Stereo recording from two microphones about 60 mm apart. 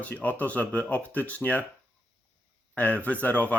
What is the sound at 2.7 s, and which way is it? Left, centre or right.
Speech, left.